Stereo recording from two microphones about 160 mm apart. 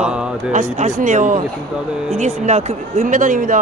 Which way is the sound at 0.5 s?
45° right (ahead or behind).